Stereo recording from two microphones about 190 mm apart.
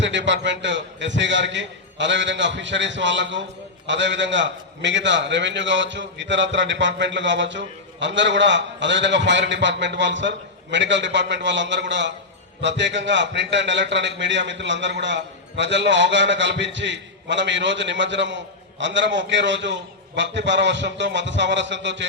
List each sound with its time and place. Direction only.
0.0 s a man's voice: 70° right (ahead or behind)